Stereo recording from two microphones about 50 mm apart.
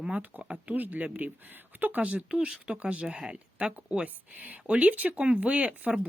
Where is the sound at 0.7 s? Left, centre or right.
Right.